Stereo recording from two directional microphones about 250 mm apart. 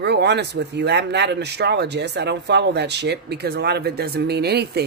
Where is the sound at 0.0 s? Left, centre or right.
Right.